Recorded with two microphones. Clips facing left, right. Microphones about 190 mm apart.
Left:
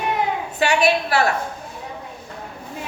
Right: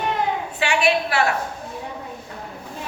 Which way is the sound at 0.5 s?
40° left (ahead or behind).